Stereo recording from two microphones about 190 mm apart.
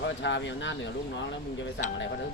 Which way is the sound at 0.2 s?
70° left (ahead or behind).